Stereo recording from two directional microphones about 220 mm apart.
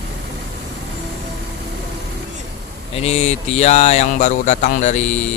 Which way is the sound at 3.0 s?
30° left (ahead or behind).